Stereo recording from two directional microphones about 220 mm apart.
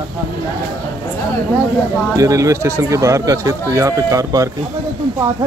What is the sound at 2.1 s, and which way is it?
Speech, 15° right (ahead or behind).